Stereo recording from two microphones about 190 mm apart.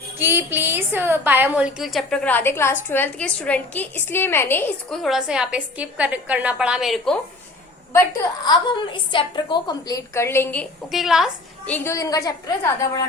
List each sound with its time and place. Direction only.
0.2 s a woman's voice: 10° right (ahead or behind)
8.4 s a woman's voice: 25° left (ahead or behind); by 11.7 s centre (ahead or behind)
11.7 s a woman's voice: 15° left (ahead or behind)